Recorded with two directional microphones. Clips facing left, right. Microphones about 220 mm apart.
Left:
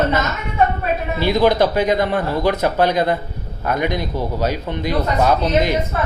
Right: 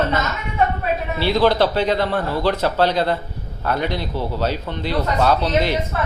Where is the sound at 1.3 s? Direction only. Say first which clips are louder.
Left 1 dB; 15° left (ahead or behind).